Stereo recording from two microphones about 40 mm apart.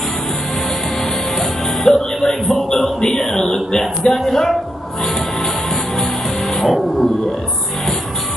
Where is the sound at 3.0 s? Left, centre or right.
Centre.